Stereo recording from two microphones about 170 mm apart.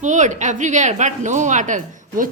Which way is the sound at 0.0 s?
45° right (ahead or behind).